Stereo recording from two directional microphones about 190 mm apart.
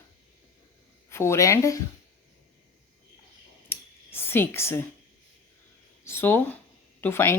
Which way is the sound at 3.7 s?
10° left (ahead or behind).